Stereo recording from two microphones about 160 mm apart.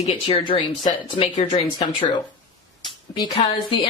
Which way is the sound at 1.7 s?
25° left (ahead or behind).